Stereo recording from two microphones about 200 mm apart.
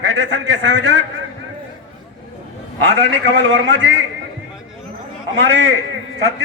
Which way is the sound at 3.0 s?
65° right (ahead or behind).